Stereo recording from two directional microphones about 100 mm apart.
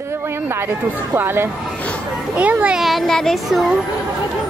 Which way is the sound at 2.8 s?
Centre (ahead or behind).